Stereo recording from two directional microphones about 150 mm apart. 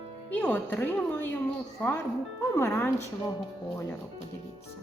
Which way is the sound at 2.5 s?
20° left (ahead or behind).